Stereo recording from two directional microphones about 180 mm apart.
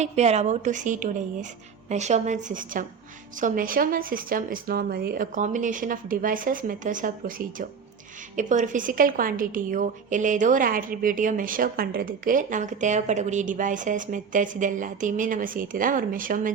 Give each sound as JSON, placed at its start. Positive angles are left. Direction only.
{"t": 0.0, "sound": "a woman's voice", "side_deg": -40}